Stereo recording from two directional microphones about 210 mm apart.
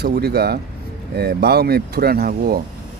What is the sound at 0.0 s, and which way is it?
Speech, 50° right (ahead or behind).